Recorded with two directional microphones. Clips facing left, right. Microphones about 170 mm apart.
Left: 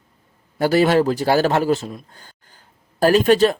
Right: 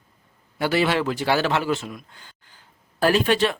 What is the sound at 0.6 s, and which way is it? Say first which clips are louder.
Speech: left 6 dB; 40° left (ahead or behind).